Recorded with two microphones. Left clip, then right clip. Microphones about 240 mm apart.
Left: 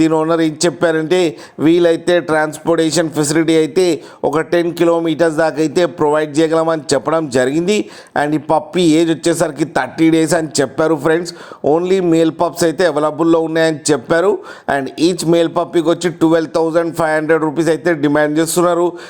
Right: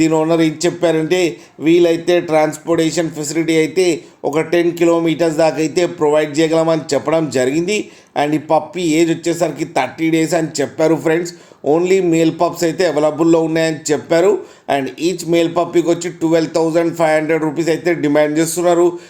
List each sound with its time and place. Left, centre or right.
0.0 s a man's voice: left